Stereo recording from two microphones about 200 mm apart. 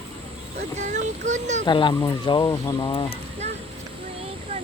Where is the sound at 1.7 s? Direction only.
25° left (ahead or behind).